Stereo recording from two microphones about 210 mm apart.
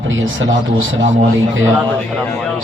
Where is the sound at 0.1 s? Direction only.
65° right (ahead or behind).